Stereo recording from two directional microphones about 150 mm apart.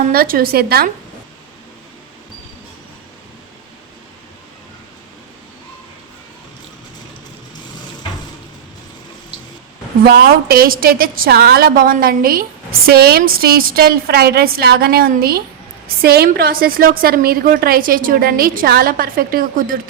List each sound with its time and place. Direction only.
0.1 s a woman's voice: 75° right (ahead or behind)
10.0 s a woman's voice: 90° right; by 19.8 s 70° right (ahead or behind)